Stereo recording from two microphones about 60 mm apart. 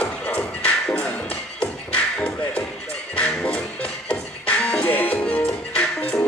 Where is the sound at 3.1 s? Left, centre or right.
Centre.